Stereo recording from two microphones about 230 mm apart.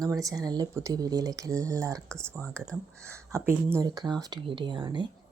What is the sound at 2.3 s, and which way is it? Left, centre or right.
Speech, centre.